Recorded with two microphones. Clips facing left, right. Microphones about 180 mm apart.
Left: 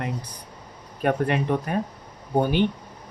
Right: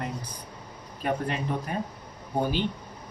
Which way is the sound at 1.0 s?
65° left (ahead or behind).